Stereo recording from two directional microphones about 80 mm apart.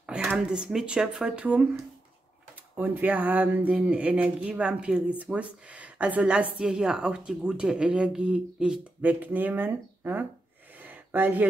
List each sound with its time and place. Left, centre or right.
0.0 s speech: centre
1.3 s speech: centre
2.7 s a woman's voice: right
9.0 s speech: right
10.8 s a sound: right